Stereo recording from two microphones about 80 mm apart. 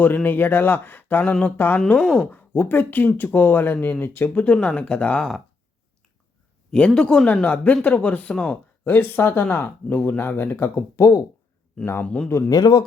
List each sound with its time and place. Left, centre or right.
0.0 s speech: left
1.2 s speech: centre
1.5 s speech: left
2.0 s speech: centre
2.3 s speech: left
4.4 s speech: centre
6.7 s speech: centre
11.0 s speech: left
12.0 s speech: centre
12.5 s a man's voice: left